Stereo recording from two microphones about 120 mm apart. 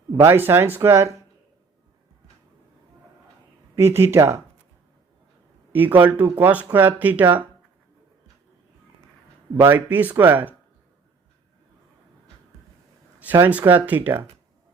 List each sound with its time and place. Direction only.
0.3 s speech: 20° right (ahead or behind)
3.8 s speech: 20° right (ahead or behind)
5.7 s speech: 15° right (ahead or behind)
9.6 s speech: 15° right (ahead or behind)
13.1 s speech: 15° right (ahead or behind)